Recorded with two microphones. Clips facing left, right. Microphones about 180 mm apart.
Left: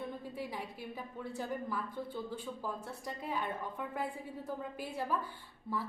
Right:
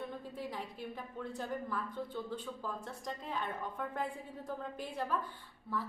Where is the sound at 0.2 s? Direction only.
10° left (ahead or behind).